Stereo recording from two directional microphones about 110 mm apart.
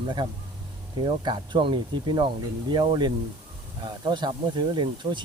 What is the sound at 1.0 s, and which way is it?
Speech, 45° right (ahead or behind).